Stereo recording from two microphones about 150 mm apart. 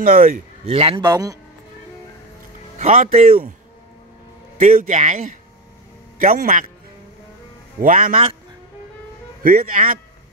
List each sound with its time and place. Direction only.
0.0 s a man's voice: 70° right (ahead or behind)
0.7 s a man's voice: 35° right (ahead or behind)
2.8 s speech: 60° right (ahead or behind)
4.7 s speech: 55° right (ahead or behind)
6.1 s a man's voice: 65° right (ahead or behind)
7.8 s speech: 65° right (ahead or behind)
9.4 s a man's voice: 70° right (ahead or behind)